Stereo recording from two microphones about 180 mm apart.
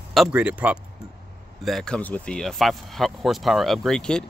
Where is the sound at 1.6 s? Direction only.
5° left (ahead or behind).